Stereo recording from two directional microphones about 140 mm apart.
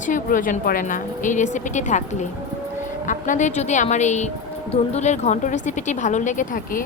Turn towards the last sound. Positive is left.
turn(degrees=75)  # may be behind; listen again after turning